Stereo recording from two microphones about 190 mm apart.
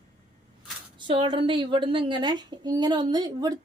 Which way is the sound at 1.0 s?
25° right (ahead or behind).